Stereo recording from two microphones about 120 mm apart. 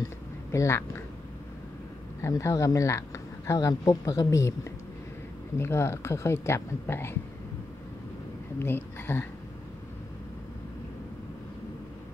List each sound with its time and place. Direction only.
0.5 s speech: 20° left (ahead or behind)
2.2 s a woman's voice: 25° left (ahead or behind)
8.5 s speech: 20° left (ahead or behind)